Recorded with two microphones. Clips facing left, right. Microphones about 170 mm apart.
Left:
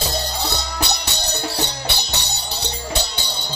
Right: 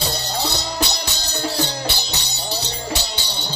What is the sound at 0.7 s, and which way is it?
Music, 65° left (ahead or behind).